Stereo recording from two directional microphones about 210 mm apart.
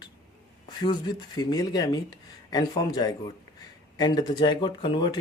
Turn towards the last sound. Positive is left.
turn(degrees=20)  # may be behind; listen again after turning